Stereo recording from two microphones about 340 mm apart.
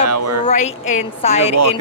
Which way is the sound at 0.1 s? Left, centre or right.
Right.